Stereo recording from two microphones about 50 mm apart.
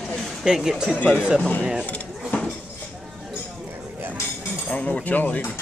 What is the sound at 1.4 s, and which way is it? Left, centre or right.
Speech, left.